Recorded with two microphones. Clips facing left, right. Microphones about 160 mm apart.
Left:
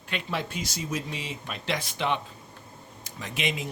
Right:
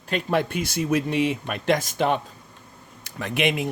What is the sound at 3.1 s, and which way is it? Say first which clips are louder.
Speech: right 8 dB; 60° right (ahead or behind).